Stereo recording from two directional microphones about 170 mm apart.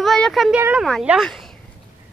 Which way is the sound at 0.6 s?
10° right (ahead or behind).